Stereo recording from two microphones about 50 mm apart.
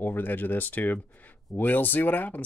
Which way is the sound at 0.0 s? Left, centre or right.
Left.